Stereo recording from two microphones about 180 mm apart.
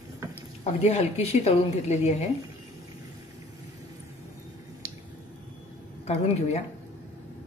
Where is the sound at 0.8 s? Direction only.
35° left (ahead or behind).